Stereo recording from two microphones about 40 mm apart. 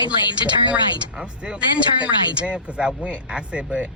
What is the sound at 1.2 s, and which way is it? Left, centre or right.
Speech, right.